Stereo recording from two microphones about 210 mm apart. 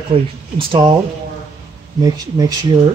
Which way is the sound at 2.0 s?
15° right (ahead or behind).